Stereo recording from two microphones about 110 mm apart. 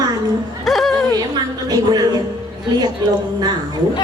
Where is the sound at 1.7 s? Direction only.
40° right (ahead or behind).